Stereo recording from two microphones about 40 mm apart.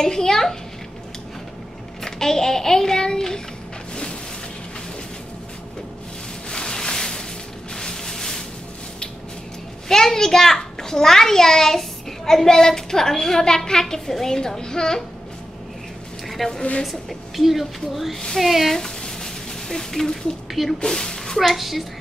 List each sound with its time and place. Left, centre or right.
0.0 s a child's voice: centre
2.0 s a child's voice: centre
3.9 s music: left
6.5 s a sound: centre
7.7 s music: centre
9.8 s a child's voice: centre
16.3 s a woman's voice: centre
18.8 s a sound: centre
20.8 s speech: centre
21.4 s speech: centre